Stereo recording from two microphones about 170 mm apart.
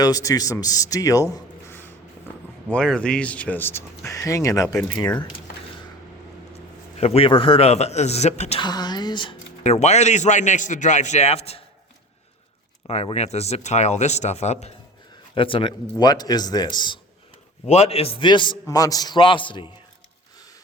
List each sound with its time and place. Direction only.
0.0 s a man's voice: 20° left (ahead or behind)
7.0 s speech: 35° left (ahead or behind)
8.6 s speech: 25° left (ahead or behind)
9.6 s a man's voice: 40° left (ahead or behind)
12.9 s speech: 35° left (ahead or behind)
17.7 s speech: 40° left (ahead or behind)